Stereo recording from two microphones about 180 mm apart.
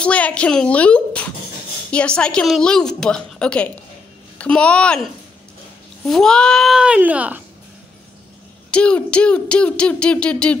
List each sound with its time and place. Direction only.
0.0 s a woman's voice: 5° left (ahead or behind)
8.6 s speech: 5° left (ahead or behind)